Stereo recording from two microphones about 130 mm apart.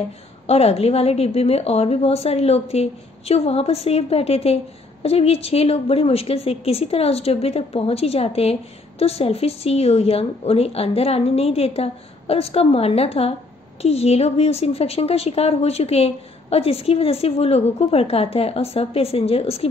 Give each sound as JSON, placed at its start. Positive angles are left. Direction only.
{"t": 0.5, "sound": "a woman's voice", "side_deg": 50}